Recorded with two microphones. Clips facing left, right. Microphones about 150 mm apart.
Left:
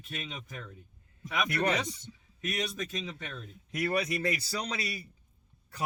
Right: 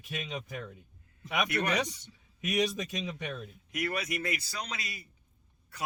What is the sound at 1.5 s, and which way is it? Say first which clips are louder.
Speech: left 6 dB; 30° left (ahead or behind).